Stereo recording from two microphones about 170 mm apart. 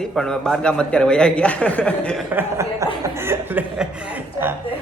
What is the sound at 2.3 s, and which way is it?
Speech, 15° right (ahead or behind).